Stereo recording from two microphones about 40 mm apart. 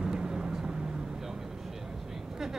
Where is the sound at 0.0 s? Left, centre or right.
Centre.